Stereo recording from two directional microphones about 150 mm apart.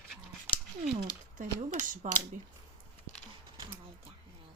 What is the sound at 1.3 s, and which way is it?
Speech, 55° right (ahead or behind).